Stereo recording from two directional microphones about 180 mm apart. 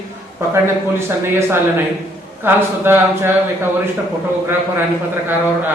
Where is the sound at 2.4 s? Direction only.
10° right (ahead or behind).